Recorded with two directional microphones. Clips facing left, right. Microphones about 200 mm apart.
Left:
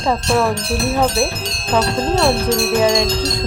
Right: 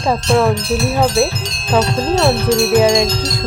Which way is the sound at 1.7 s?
10° right (ahead or behind).